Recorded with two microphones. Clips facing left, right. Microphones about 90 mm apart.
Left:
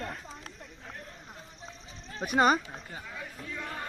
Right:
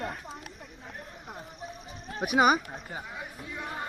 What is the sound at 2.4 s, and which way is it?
Speech, 10° right (ahead or behind).